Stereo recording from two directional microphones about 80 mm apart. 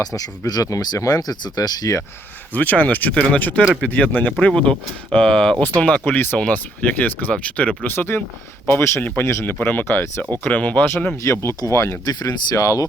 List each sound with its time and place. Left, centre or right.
0.0 s speech: left
2.5 s speech: left
5.8 s speech: centre
7.9 s speech: left
11.2 s speech: left
12.0 s speech: left